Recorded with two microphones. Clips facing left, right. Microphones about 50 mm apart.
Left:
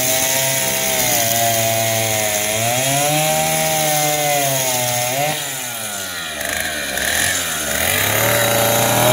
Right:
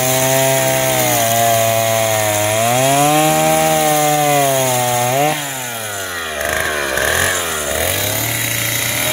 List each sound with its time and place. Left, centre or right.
0.1 s chainsaw: right
7.0 s chainsaw: right